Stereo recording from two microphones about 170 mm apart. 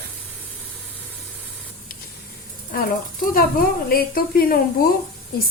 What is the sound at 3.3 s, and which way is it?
A woman's voice, 60° left (ahead or behind).